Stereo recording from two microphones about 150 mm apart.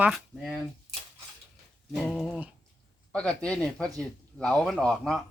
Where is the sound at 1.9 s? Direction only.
5° left (ahead or behind).